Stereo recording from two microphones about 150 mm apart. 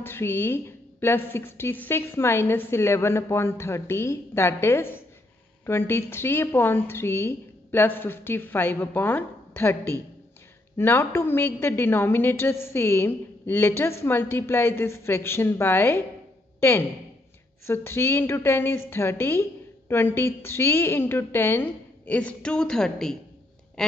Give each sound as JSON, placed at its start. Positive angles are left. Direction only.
{"t": 0.0, "sound": "a woman's voice", "side_deg": 15}
{"t": 16.5, "sound": "a sound", "side_deg": 15}
{"t": 17.6, "sound": "a woman's voice", "side_deg": 15}